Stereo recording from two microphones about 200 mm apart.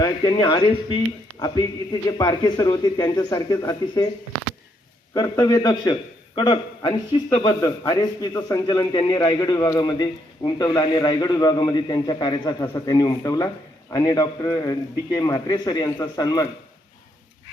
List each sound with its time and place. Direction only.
0.0 s a man's voice: 20° left (ahead or behind)
5.1 s a man's voice: 20° left (ahead or behind)